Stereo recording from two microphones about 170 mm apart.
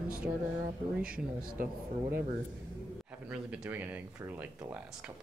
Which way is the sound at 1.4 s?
55° right (ahead or behind).